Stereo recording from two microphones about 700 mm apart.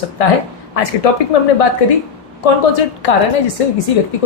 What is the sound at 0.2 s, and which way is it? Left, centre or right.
A woman's voice, left.